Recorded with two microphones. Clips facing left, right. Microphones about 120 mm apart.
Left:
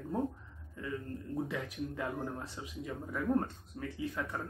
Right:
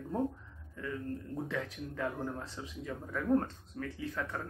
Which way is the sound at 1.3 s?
10° left (ahead or behind).